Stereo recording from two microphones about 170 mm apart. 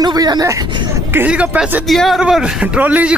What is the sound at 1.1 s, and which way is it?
Speech, 10° right (ahead or behind).